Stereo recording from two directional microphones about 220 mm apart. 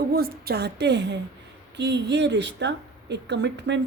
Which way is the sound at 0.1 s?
45° right (ahead or behind).